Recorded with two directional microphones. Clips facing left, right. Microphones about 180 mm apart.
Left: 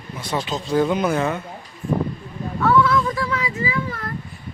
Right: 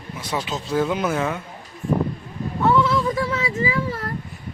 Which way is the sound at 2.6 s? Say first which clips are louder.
Left 1 dB; 20° right (ahead or behind).